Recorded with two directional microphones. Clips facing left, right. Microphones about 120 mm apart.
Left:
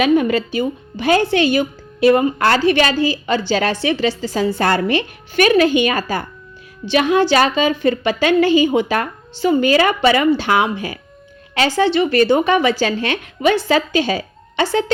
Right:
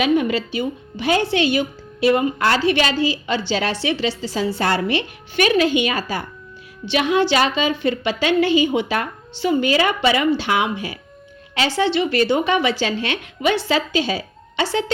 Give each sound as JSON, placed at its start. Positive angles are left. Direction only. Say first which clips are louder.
{"t": 0.0, "sound": "speech", "louder": "left 3 dB", "side_deg": 45}